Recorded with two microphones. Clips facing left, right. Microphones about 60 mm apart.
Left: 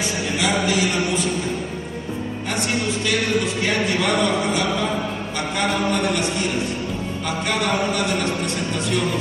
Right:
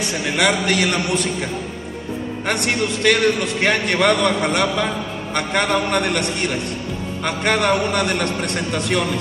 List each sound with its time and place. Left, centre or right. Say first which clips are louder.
0.0 s a man's voice: right 3 dB; right
2.4 s a man's voice: right 3 dB; right